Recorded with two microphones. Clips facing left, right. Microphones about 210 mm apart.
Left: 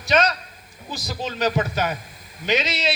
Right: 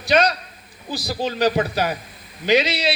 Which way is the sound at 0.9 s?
35° right (ahead or behind).